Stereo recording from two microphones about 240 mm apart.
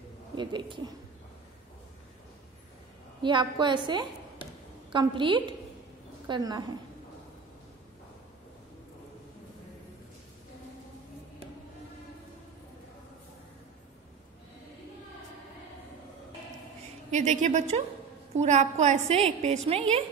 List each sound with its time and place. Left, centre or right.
0.4 s a woman's voice: centre
3.2 s a woman's voice: centre
17.1 s a woman's voice: right